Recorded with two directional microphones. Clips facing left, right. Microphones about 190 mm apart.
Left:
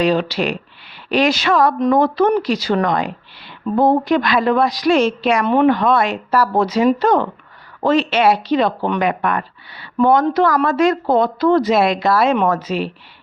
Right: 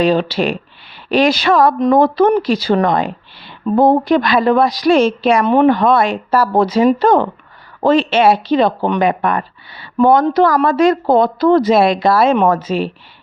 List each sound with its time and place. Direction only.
0.0 s a woman's voice: 30° right (ahead or behind)